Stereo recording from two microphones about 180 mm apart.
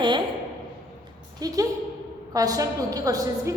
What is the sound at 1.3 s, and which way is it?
A woman's voice, 20° right (ahead or behind).